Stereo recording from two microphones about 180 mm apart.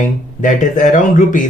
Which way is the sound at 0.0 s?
45° left (ahead or behind).